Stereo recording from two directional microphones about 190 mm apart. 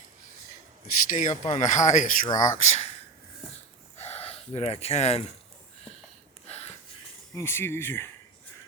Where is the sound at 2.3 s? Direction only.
20° left (ahead or behind).